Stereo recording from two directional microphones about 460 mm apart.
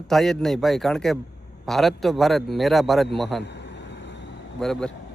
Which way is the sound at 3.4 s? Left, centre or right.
Left.